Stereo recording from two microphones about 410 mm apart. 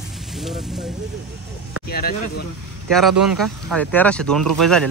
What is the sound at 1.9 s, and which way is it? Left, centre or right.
Speech, left.